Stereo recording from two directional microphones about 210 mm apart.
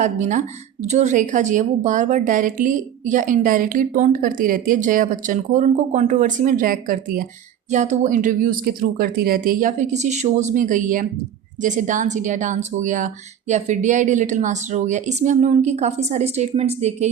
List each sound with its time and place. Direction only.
0.0 s a woman's voice: 35° right (ahead or behind)